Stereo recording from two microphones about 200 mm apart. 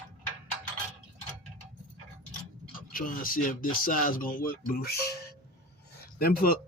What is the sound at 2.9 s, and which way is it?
Speech, 45° left (ahead or behind).